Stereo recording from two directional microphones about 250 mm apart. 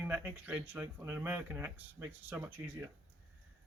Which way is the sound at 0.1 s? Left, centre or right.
Centre.